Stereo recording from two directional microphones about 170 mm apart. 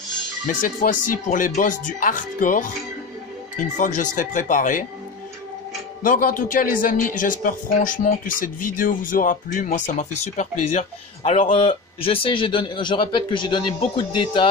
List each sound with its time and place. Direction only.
0.5 s speech: 50° left (ahead or behind)
6.0 s a man's voice: 55° left (ahead or behind); by 14.5 s 30° left (ahead or behind)